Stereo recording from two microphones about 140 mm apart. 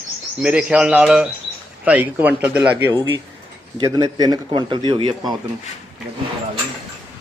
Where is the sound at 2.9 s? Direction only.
25° right (ahead or behind).